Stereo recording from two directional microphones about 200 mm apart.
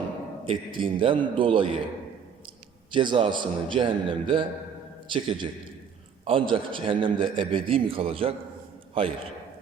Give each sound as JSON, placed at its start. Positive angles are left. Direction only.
{"t": 0.4, "sound": "a man's voice", "side_deg": -25}
{"t": 2.9, "sound": "a man's voice", "side_deg": -25}